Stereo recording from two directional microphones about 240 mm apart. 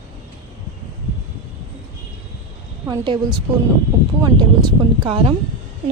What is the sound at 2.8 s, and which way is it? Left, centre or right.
Speech, centre.